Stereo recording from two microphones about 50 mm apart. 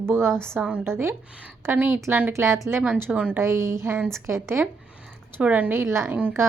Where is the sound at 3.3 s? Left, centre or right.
Right.